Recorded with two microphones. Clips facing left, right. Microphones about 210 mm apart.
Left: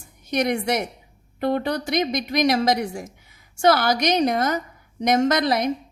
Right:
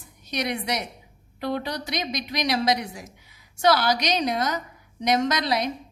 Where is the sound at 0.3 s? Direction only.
50° left (ahead or behind).